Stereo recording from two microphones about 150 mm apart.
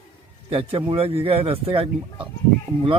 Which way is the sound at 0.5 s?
35° right (ahead or behind).